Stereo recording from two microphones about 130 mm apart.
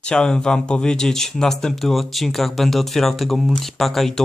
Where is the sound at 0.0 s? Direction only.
5° left (ahead or behind).